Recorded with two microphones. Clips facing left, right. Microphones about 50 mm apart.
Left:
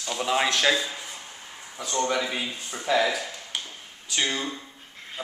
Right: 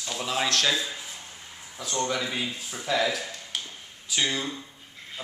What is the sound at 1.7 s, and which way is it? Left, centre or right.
A man's voice, centre.